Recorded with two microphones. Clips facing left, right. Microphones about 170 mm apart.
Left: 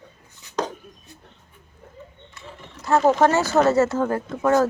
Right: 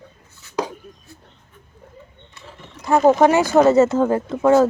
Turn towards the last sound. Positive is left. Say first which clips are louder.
# right 5 dB
turn(degrees=-20)  # may be behind; listen again after turning